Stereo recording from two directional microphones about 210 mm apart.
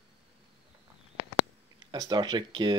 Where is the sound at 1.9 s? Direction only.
20° right (ahead or behind).